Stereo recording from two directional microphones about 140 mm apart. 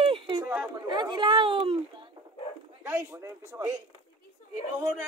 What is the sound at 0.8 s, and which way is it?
Speech, 35° right (ahead or behind).